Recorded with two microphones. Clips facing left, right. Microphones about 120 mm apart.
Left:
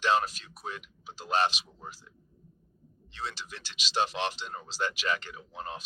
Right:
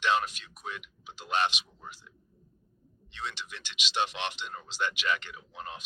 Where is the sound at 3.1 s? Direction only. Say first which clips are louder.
Left 1 dB; 35° left (ahead or behind).